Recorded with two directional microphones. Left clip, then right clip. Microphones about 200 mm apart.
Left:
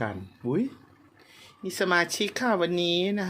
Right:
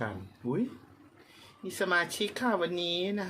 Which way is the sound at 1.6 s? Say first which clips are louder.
Left 4 dB; 35° left (ahead or behind).